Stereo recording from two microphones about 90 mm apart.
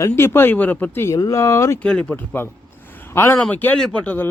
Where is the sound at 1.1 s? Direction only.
40° left (ahead or behind).